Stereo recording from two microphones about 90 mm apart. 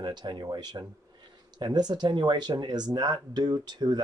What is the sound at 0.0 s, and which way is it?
A man's voice, 55° right (ahead or behind).